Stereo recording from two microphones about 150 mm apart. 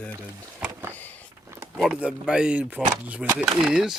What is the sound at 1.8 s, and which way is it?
Speech, 5° right (ahead or behind).